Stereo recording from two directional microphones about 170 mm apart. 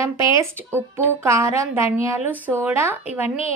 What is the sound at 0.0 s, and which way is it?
Speech, 15° right (ahead or behind).